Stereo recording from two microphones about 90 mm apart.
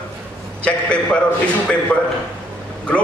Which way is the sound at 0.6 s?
15° left (ahead or behind).